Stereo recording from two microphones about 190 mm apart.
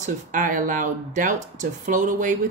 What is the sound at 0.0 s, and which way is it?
Speech, 45° right (ahead or behind).